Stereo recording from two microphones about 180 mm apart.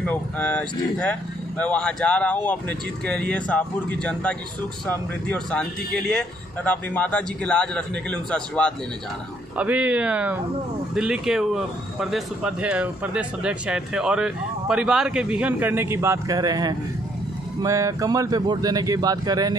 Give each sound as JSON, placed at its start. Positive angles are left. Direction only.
{"t": 0.0, "sound": "speech", "side_deg": 5}
{"t": 9.6, "sound": "speech", "side_deg": -10}